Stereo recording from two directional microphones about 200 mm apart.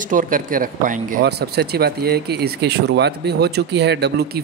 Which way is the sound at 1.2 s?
55° right (ahead or behind).